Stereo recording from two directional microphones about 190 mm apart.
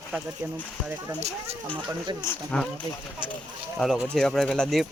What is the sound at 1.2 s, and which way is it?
Speech, 35° right (ahead or behind).